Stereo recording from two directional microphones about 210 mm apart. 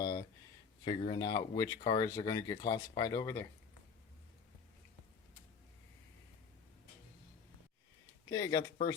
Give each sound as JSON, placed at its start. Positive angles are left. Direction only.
{"t": 0.0, "sound": "a sound", "side_deg": 15}
{"t": 0.9, "sound": "speech", "side_deg": 25}
{"t": 8.3, "sound": "speech", "side_deg": 15}